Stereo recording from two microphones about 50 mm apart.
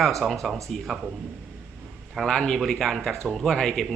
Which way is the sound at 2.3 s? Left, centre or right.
Centre.